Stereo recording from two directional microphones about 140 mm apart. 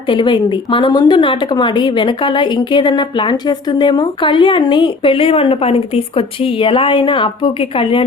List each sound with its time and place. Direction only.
0.1 s speech: 35° left (ahead or behind)